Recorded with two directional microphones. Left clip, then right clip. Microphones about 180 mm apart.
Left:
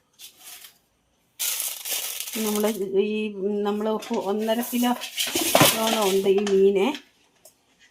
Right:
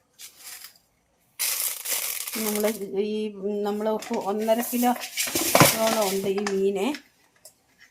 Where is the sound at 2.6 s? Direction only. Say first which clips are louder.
Left 3 dB; 20° left (ahead or behind).